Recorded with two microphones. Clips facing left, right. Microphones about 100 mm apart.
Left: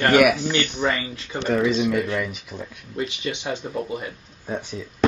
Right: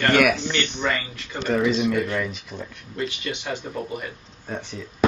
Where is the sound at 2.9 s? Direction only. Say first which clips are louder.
Left 1 dB; 25° left (ahead or behind).